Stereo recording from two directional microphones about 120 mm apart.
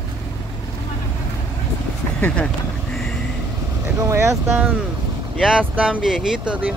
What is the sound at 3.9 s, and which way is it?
Speech, 25° right (ahead or behind).